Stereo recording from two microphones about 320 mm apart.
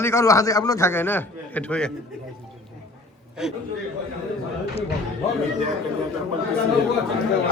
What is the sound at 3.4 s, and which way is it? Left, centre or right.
Speech, centre.